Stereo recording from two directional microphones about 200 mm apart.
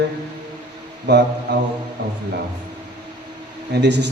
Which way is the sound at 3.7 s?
60° right (ahead or behind).